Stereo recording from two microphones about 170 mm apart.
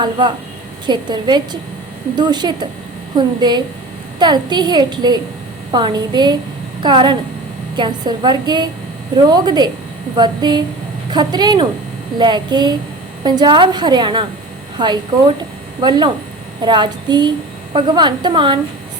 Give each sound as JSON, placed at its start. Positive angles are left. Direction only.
{"t": 0.0, "sound": "a woman's voice", "side_deg": -25}